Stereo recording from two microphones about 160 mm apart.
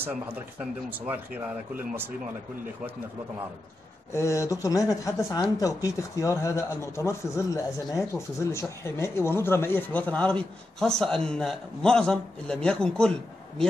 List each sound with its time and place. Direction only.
0.0 s speech: 10° right (ahead or behind)
4.1 s speech: 20° left (ahead or behind)